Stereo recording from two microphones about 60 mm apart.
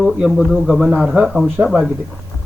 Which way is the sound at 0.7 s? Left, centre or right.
Centre.